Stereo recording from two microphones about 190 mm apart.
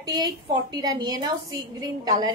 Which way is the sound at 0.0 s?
20° right (ahead or behind).